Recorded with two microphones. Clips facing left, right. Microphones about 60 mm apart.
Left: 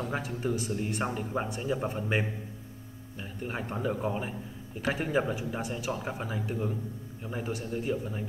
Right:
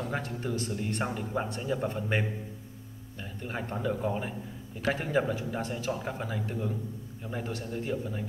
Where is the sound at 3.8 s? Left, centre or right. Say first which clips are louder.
Even; left.